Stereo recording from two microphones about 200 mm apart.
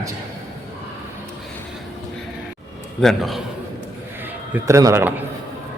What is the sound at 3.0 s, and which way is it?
Speech, centre (ahead or behind).